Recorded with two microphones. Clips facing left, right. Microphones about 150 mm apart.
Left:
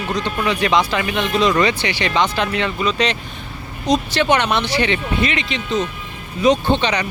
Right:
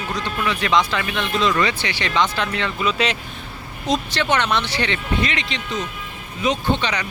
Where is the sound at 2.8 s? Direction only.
5° right (ahead or behind).